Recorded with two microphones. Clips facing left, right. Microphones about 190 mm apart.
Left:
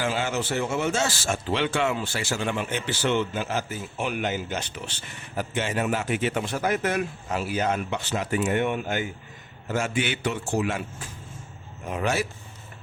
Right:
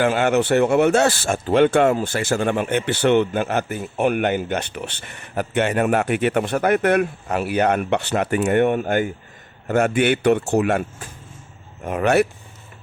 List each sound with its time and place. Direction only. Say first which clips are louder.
0.0 s speech: right 9 dB; 60° right (ahead or behind)